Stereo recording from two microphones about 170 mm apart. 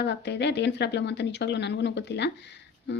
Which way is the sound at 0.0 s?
85° left.